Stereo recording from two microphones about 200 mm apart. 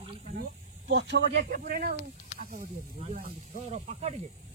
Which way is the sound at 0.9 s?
65° right (ahead or behind).